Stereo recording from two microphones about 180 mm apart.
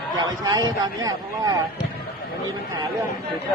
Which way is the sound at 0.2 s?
20° right (ahead or behind).